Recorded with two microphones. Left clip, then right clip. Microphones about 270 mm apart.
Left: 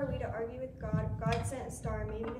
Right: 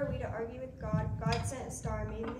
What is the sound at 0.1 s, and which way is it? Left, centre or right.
A woman's voice, centre.